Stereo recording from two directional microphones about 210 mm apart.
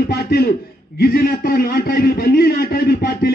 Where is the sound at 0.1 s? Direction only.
50° left (ahead or behind).